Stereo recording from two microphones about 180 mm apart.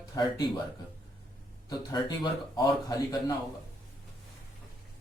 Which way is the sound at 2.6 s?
20° left (ahead or behind).